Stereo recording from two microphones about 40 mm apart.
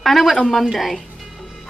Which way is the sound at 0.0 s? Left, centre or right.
Centre.